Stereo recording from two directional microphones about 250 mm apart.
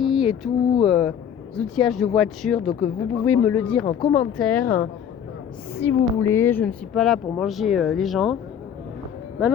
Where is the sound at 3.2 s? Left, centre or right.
Left.